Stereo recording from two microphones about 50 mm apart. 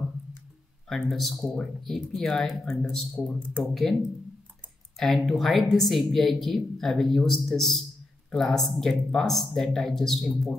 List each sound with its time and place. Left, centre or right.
0.8 s a woman's voice: centre
3.2 s speech: left
4.9 s a woman's voice: centre